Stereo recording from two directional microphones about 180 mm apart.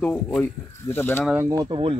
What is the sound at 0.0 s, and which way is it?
Speech, 5° left (ahead or behind).